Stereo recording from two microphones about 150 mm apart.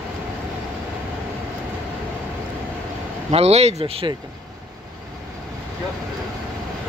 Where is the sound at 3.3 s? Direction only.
45° right (ahead or behind).